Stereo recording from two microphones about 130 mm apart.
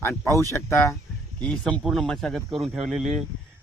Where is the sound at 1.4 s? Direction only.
10° left (ahead or behind).